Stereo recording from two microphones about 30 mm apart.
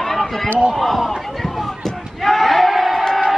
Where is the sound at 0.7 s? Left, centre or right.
Centre.